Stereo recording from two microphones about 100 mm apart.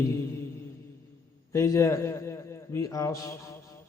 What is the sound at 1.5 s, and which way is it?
A man's voice, 30° left (ahead or behind).